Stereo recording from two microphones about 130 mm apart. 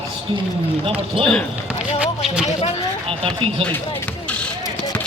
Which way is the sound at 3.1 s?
45° right (ahead or behind).